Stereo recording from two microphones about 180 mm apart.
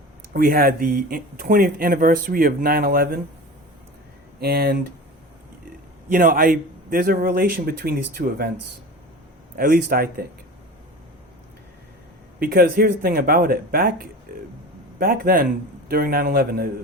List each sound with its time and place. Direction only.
0.3 s speech: 55° right (ahead or behind)
4.4 s speech: 60° right (ahead or behind)
6.1 s a man's voice: 50° right (ahead or behind)
9.6 s speech: 55° right (ahead or behind)
12.4 s a man's voice: 55° right (ahead or behind)